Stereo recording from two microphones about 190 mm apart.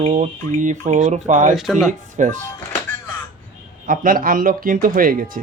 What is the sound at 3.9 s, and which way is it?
Speech, 45° right (ahead or behind).